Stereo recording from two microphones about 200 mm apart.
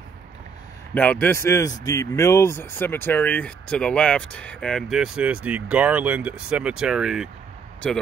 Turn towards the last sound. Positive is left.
turn(degrees=5)  # may be behind; listen again after turning